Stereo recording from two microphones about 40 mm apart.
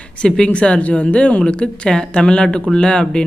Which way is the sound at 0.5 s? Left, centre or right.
Left.